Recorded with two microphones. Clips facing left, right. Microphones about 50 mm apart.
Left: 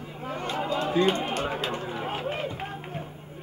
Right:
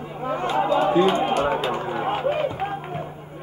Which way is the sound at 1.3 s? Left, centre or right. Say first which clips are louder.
Right 8 dB; right.